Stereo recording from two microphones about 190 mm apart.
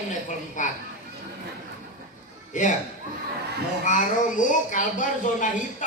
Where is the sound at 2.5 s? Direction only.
40° left (ahead or behind).